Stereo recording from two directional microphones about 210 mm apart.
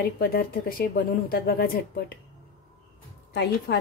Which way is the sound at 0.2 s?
45° left (ahead or behind).